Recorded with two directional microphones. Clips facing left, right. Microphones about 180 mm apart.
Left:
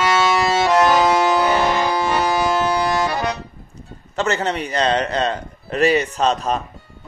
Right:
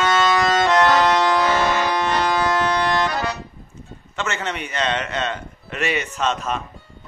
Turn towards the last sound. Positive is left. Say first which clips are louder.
# left 4 dB
turn(degrees=35)  # may be behind; listen again after turning